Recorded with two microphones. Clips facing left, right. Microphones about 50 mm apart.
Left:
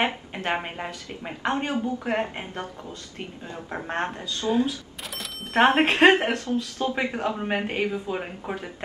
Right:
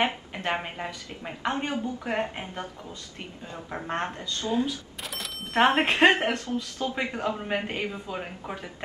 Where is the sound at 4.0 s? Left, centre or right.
Left.